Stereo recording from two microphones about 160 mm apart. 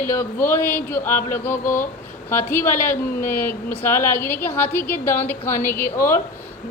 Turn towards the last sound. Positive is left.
turn(degrees=15)  # may be behind; listen again after turning